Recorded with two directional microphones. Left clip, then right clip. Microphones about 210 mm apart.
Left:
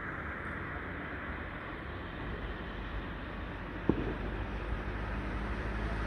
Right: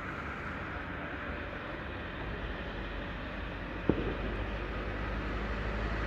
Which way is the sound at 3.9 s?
50° left (ahead or behind).